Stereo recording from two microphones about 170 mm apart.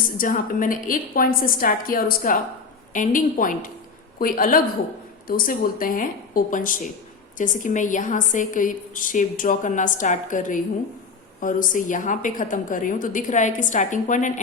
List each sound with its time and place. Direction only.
0.2 s a woman's voice: 55° left (ahead or behind)